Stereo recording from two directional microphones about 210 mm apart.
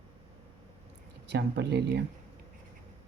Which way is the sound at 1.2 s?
55° right (ahead or behind).